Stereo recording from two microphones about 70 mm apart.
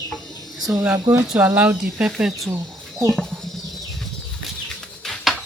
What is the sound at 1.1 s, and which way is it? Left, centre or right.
Speech, right.